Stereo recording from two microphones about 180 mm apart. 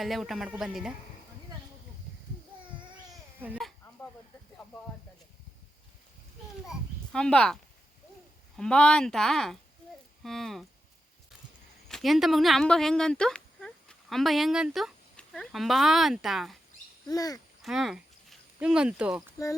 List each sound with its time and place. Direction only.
0.0 s speech: centre (ahead or behind)
3.4 s speech: 10° right (ahead or behind)
6.7 s a child's voice: 5° left (ahead or behind)
11.9 s speech: centre (ahead or behind)
17.1 s speech: 20° left (ahead or behind)
17.6 s speech: centre (ahead or behind)